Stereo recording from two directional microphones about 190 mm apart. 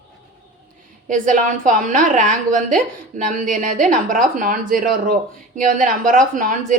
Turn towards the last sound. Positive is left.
turn(degrees=-45)  # may be behind; listen again after turning